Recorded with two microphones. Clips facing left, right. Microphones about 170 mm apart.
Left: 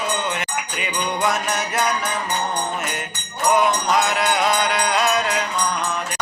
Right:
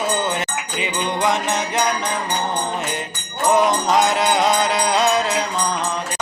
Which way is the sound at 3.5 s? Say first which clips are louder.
Right 2 dB; 35° right (ahead or behind).